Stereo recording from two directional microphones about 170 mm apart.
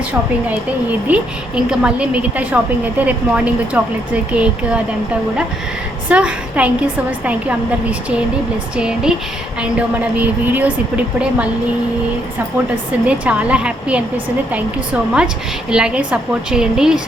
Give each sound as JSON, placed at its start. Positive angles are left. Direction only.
{"t": 0.1, "sound": "a woman's voice", "side_deg": -10}
{"t": 6.1, "sound": "a woman's voice", "side_deg": -5}
{"t": 8.7, "sound": "a woman's voice", "side_deg": -5}
{"t": 13.1, "sound": "a woman's voice", "side_deg": -5}